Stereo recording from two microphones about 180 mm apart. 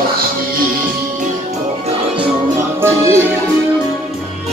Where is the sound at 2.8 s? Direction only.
15° right (ahead or behind).